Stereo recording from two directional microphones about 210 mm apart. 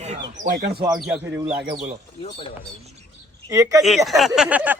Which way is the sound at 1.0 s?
5° right (ahead or behind).